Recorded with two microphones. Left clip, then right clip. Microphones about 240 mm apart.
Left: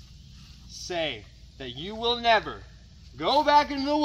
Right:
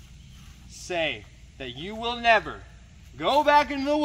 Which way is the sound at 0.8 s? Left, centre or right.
Centre.